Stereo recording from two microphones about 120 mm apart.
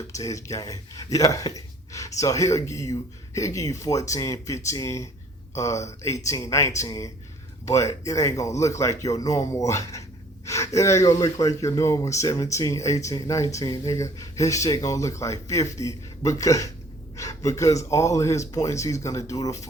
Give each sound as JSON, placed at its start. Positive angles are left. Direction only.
{"t": 0.1, "sound": "speech", "side_deg": 25}